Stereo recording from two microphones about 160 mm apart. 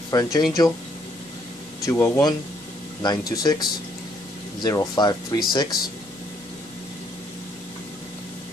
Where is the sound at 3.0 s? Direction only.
25° left (ahead or behind).